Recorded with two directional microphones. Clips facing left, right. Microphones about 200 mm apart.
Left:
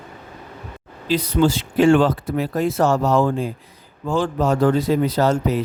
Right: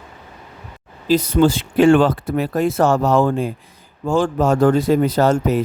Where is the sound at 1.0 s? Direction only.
45° right (ahead or behind).